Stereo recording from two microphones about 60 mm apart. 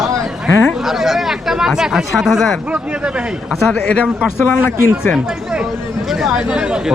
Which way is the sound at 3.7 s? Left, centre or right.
Centre.